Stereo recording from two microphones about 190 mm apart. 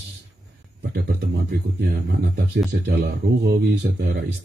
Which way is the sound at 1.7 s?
60° right (ahead or behind).